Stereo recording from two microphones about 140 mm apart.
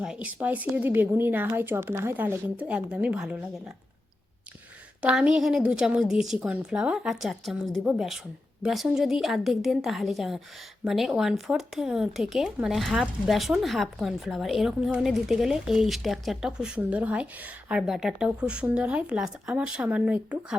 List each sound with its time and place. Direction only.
0.0 s speech: 5° right (ahead or behind)
4.9 s speech: 10° right (ahead or behind)